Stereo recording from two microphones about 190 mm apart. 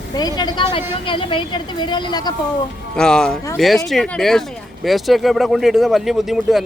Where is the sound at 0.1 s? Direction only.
20° left (ahead or behind).